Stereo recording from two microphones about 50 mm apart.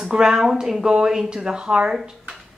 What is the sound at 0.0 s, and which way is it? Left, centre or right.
Speech, centre.